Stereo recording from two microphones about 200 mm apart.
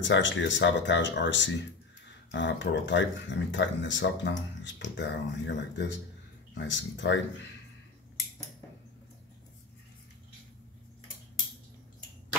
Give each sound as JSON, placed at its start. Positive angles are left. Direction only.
{"t": 0.0, "sound": "speech", "side_deg": 65}